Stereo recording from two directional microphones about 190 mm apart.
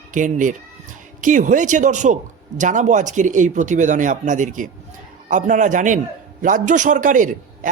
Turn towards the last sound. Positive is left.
turn(degrees=-45)  # may be behind; listen again after turning